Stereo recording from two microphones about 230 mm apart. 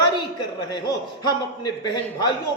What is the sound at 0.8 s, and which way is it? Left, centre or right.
Speech, centre.